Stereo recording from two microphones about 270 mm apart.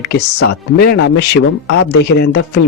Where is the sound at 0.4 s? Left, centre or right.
Left.